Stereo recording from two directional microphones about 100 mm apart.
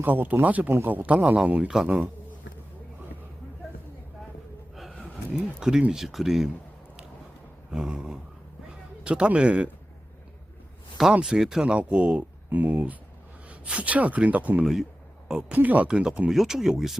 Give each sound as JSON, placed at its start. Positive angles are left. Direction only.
{"t": 0.0, "sound": "speech", "side_deg": -20}
{"t": 4.8, "sound": "speech", "side_deg": 0}
{"t": 7.7, "sound": "speech", "side_deg": -10}
{"t": 11.1, "sound": "speech", "side_deg": -5}